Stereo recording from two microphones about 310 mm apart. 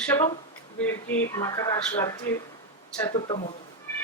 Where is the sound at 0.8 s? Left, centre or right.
Centre.